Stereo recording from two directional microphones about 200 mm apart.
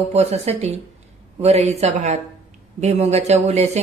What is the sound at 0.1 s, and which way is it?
A woman's voice, 30° right (ahead or behind).